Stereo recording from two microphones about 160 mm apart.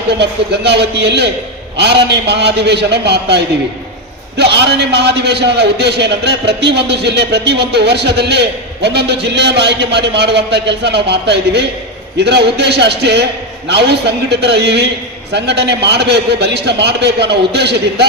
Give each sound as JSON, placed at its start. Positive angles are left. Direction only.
{"t": 0.1, "sound": "a man's voice", "side_deg": -90}